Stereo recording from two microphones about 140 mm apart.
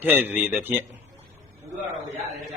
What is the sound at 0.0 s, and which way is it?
Mantra, 15° right (ahead or behind).